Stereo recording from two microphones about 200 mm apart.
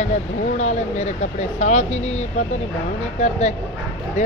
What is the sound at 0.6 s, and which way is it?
Speech, 35° left (ahead or behind).